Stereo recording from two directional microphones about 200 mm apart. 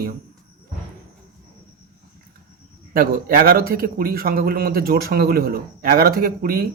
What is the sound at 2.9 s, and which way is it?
Speech, 45° right (ahead or behind).